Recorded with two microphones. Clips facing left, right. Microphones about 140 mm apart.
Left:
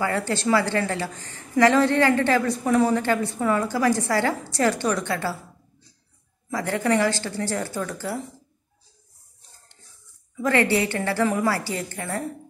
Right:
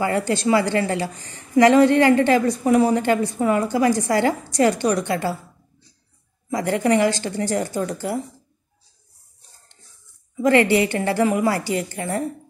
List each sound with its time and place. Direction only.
0.0 s speech: 15° right (ahead or behind)
6.5 s a woman's voice: 20° right (ahead or behind)
10.3 s speech: 20° right (ahead or behind)